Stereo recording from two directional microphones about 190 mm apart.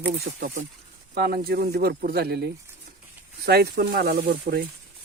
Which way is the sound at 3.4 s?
55° right (ahead or behind).